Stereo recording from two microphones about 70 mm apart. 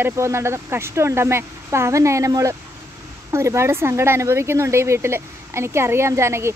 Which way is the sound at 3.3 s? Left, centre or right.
Right.